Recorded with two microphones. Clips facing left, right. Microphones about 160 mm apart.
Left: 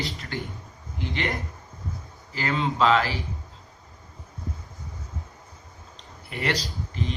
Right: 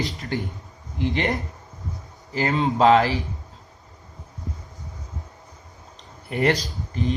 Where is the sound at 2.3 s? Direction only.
45° right (ahead or behind).